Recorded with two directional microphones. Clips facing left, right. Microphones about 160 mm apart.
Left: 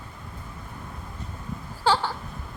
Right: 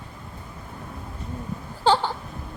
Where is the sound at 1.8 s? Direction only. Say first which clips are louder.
Right 3 dB; 20° right (ahead or behind).